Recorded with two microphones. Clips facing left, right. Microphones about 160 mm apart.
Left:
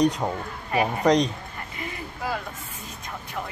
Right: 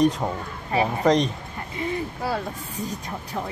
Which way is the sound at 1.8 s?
35° right (ahead or behind).